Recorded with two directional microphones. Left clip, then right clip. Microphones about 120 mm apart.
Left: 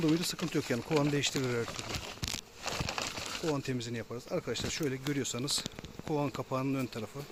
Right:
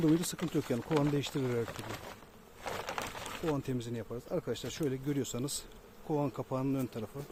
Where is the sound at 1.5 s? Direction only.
20° right (ahead or behind).